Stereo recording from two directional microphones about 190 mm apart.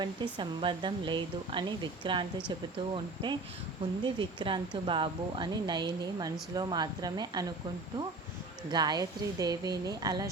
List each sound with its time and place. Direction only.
0.0 s speech: 25° right (ahead or behind)
8.7 s speech: 20° right (ahead or behind)